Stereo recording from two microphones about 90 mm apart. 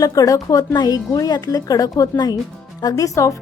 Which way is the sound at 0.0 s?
40° left (ahead or behind).